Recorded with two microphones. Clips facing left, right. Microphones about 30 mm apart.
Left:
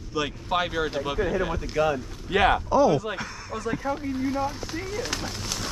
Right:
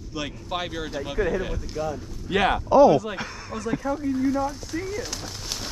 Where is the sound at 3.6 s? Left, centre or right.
Left.